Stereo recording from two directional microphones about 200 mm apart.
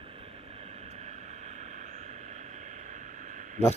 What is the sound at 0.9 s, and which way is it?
Vehicle, 35° right (ahead or behind).